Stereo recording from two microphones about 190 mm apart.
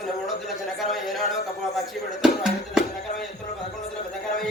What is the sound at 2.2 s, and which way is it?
Music, centre (ahead or behind).